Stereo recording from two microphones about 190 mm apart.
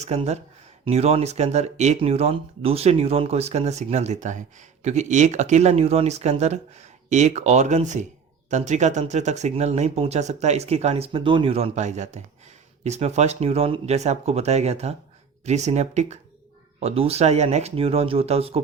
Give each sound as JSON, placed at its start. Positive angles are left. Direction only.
{"t": 0.0, "sound": "speech", "side_deg": -35}